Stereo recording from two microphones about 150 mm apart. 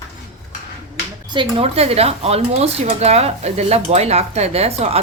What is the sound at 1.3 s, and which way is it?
Speech, 35° right (ahead or behind).